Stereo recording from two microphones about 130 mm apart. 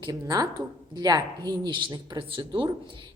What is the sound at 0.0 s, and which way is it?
Speech, 30° right (ahead or behind).